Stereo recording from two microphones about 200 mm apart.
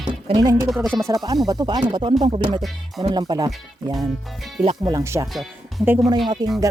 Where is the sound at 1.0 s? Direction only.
20° right (ahead or behind).